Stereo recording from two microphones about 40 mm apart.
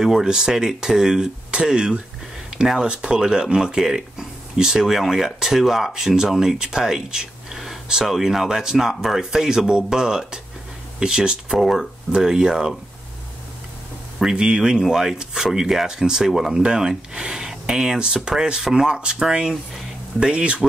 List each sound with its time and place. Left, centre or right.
0.0 s speech: centre
14.4 s speech: centre
16.3 s speech: centre
16.5 s speech: centre